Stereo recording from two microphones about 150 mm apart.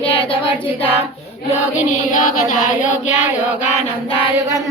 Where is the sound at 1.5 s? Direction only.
55° left (ahead or behind).